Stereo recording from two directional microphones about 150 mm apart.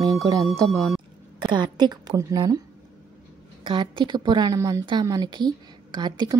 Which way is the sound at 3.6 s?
30° right (ahead or behind).